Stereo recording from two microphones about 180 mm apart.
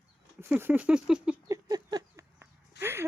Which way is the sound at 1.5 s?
20° right (ahead or behind).